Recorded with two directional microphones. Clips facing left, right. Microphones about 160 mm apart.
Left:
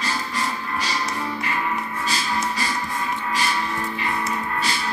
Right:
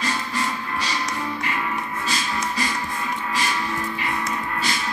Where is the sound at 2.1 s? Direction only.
30° left (ahead or behind).